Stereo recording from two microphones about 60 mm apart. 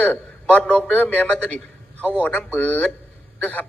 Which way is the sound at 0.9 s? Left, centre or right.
Left.